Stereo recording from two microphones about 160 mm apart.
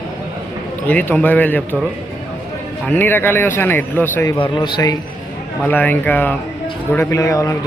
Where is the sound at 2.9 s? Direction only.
15° left (ahead or behind).